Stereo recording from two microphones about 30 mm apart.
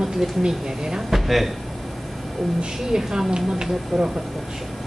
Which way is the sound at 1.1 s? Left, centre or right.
Centre.